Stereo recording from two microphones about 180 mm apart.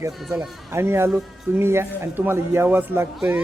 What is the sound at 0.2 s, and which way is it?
Speech, centre (ahead or behind).